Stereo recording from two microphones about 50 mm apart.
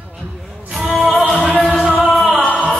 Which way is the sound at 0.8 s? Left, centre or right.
Centre.